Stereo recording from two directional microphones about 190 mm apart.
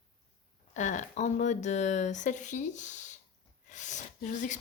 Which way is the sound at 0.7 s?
40° left (ahead or behind).